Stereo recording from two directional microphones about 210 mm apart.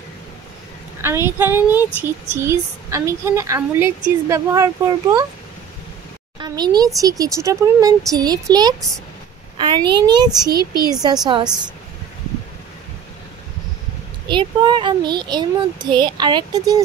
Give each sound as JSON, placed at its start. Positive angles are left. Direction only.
{"t": 1.0, "sound": "a woman's voice", "side_deg": -10}
{"t": 6.4, "sound": "a child's voice", "side_deg": -20}
{"t": 14.3, "sound": "a child's voice", "side_deg": -20}